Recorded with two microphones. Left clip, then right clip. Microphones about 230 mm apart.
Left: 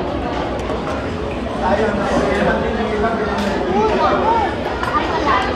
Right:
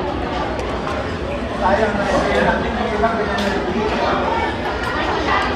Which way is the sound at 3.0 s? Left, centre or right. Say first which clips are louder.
Even; right.